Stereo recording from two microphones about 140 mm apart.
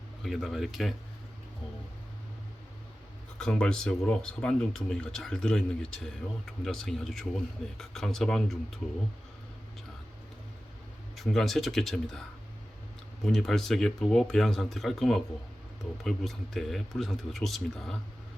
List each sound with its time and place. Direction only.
0.2 s speech: centre (ahead or behind)
3.3 s speech: 5° left (ahead or behind)
11.2 s speech: centre (ahead or behind)
13.2 s speech: 5° left (ahead or behind)